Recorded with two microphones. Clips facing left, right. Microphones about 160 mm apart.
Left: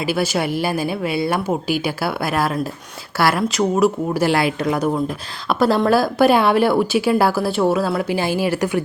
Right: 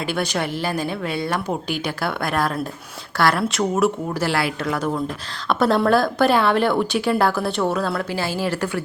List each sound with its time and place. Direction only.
0.1 s a woman's voice: 10° left (ahead or behind)
5.5 s a woman's voice: centre (ahead or behind)